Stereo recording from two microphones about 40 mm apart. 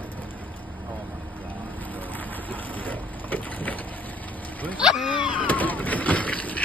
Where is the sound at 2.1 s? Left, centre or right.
Left.